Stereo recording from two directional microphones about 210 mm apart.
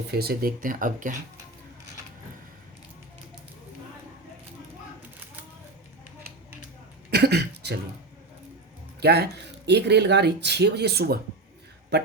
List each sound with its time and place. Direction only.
0.1 s speech: 45° right (ahead or behind)
7.1 s a sound: 50° right (ahead or behind)
9.0 s speech: 50° right (ahead or behind)